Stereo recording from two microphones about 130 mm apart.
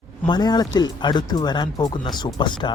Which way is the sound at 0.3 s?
30° left (ahead or behind).